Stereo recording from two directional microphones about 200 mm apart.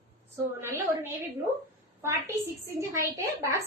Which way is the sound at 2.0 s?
10° right (ahead or behind).